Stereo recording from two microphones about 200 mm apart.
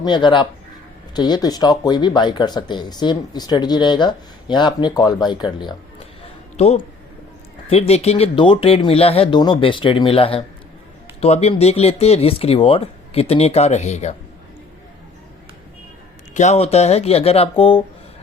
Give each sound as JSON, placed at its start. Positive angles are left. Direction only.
{"t": 0.0, "sound": "speech", "side_deg": 20}
{"t": 16.3, "sound": "speech", "side_deg": 35}